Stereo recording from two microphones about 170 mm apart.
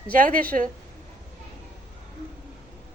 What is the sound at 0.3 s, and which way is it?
Speech, 55° right (ahead or behind).